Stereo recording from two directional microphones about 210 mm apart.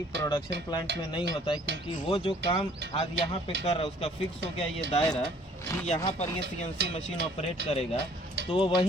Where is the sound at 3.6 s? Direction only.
30° left (ahead or behind).